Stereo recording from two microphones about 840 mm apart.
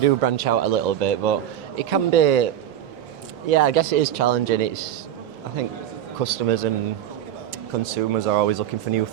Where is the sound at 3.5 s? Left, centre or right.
Right.